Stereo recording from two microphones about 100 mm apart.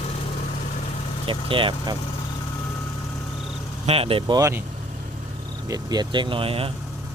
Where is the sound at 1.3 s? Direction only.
60° right (ahead or behind).